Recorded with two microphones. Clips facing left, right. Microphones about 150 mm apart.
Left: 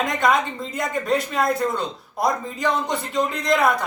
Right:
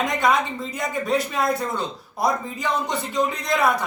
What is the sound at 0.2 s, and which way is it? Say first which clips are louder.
A man's voice: left 2 dB; centre (ahead or behind).